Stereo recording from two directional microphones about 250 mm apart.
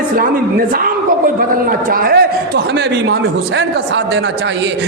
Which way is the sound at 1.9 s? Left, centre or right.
Right.